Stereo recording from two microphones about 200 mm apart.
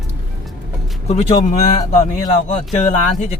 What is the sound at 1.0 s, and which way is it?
Music, 35° left (ahead or behind).